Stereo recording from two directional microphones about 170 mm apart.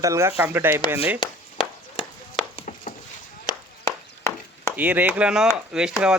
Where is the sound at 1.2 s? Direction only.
30° left (ahead or behind).